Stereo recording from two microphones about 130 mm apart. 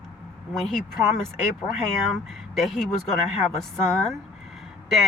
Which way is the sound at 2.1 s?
Centre (ahead or behind).